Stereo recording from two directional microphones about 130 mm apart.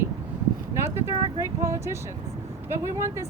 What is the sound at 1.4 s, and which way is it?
Speech, 20° right (ahead or behind).